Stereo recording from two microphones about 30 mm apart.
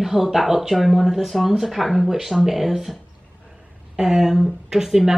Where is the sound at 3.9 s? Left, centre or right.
Centre.